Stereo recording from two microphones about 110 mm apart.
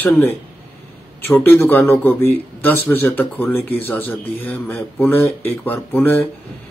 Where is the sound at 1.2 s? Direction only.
20° left (ahead or behind).